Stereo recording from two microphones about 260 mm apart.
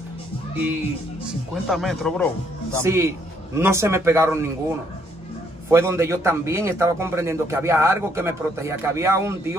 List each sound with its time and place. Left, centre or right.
1.5 s speech: centre
2.8 s a man's voice: centre
5.7 s a man's voice: centre